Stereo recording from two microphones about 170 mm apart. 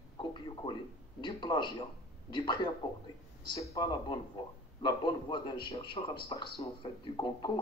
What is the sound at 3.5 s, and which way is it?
A man's voice, 20° left (ahead or behind).